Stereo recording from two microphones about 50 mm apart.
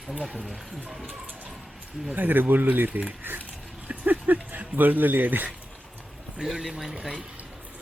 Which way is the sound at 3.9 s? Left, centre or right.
Right.